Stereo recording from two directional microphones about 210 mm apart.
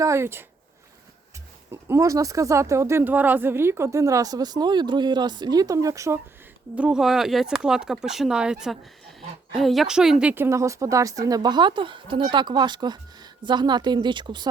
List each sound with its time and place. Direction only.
0.0 s speech: 15° right (ahead or behind)
1.7 s speech: 15° right (ahead or behind)
6.7 s a woman's voice: 5° right (ahead or behind); by 14.4 s 20° right (ahead or behind)